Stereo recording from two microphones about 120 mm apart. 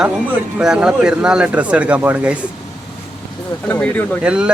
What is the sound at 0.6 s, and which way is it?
Speech, 5° right (ahead or behind).